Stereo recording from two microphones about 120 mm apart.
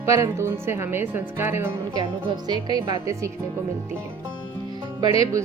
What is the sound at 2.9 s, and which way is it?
Speech, 25° right (ahead or behind).